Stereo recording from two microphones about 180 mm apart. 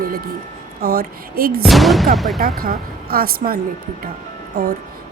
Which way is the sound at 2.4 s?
55° right (ahead or behind).